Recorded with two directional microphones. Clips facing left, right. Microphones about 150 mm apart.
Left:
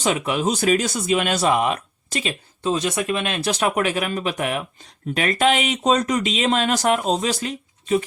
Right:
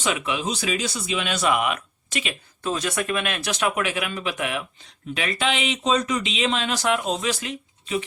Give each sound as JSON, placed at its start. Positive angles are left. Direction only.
{"t": 0.3, "sound": "speech", "side_deg": 45}
{"t": 1.4, "sound": "speech", "side_deg": 35}
{"t": 2.6, "sound": "speech", "side_deg": 25}